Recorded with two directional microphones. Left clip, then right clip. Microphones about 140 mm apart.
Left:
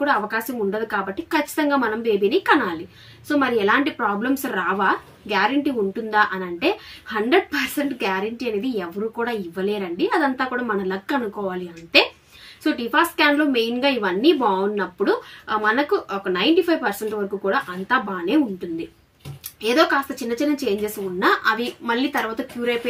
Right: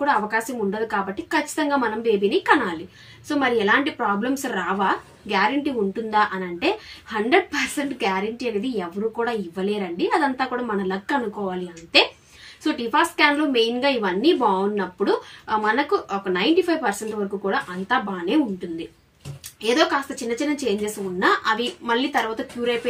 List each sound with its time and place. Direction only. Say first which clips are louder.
0.0 s a woman's voice: even; 15° left (ahead or behind)
19.6 s a woman's voice: left 2 dB; 15° left (ahead or behind)